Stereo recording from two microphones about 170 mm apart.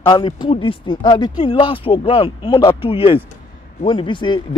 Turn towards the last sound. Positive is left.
turn(degrees=25)  # may be behind; listen again after turning